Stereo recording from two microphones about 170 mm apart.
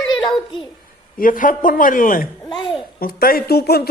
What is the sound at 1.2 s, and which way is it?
Speech, 55° left (ahead or behind).